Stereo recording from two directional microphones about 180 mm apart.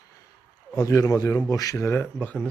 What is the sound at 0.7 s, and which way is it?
A man's voice, 20° left (ahead or behind).